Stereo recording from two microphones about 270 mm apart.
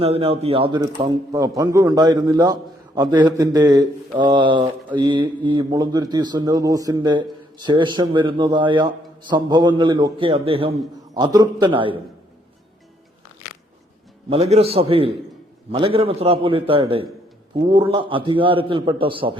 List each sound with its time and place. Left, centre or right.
0.0 s a man's voice: right
14.3 s a man's voice: right